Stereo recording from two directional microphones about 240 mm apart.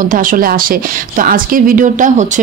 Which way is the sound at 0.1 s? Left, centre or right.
Right.